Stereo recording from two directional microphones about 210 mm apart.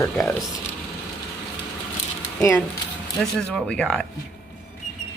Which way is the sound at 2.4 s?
10° left (ahead or behind).